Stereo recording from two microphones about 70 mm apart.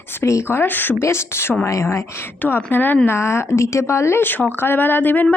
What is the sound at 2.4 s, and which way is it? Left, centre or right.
Speech, left.